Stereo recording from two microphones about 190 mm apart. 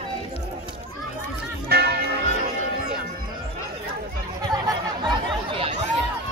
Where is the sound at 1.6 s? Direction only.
55° right (ahead or behind).